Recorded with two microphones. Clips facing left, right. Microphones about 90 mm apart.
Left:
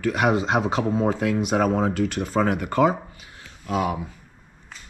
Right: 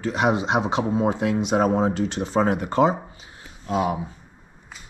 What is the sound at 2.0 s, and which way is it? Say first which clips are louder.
Speech: left 1 dB; 55° left (ahead or behind).